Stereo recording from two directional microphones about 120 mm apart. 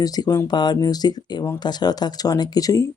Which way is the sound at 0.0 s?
30° left (ahead or behind).